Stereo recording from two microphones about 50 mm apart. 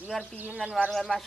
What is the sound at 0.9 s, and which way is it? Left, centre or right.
Speech, centre.